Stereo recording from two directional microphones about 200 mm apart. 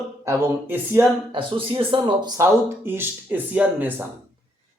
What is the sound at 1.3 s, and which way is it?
Speech, 25° right (ahead or behind).